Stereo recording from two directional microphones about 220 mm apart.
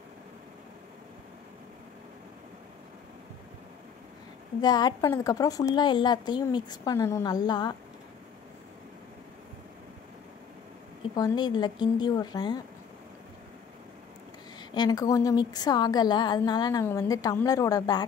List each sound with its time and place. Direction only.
4.6 s a woman's voice: 20° left (ahead or behind)
11.1 s a woman's voice: 20° left (ahead or behind)
14.6 s a woman's voice: 20° left (ahead or behind)